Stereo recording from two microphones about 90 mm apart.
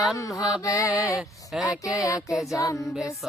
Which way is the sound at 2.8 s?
5° right (ahead or behind).